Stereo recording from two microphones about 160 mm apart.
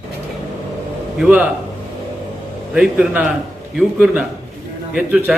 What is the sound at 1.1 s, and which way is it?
Speech, 5° right (ahead or behind).